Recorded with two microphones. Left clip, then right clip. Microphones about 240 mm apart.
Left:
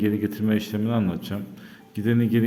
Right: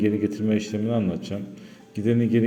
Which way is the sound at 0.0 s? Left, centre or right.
Centre.